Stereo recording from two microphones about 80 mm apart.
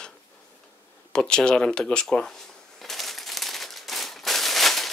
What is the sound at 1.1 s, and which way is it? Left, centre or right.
Speech, centre.